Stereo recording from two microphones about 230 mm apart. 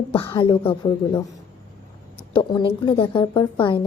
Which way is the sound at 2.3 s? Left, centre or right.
Left.